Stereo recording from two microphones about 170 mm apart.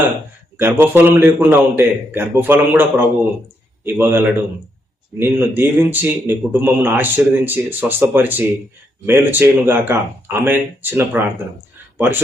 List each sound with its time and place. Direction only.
0.5 s a man's voice: 10° right (ahead or behind)